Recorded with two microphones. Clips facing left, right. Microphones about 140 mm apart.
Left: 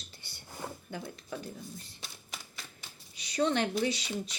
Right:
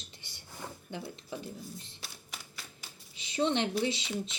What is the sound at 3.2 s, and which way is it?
Speech, 25° right (ahead or behind).